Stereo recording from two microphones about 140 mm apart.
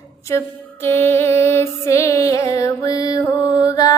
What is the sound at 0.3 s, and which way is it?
Mantra, 20° left (ahead or behind).